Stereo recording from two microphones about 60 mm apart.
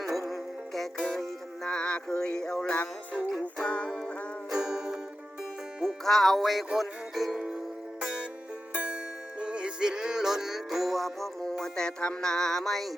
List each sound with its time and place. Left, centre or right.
0.0 s music: centre
3.4 s music: left
3.8 s music: centre
4.5 s music: centre
5.8 s music: centre
8.7 s music: right; by 12.9 s centre